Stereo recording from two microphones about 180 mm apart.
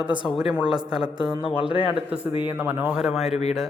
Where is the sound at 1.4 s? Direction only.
30° left (ahead or behind).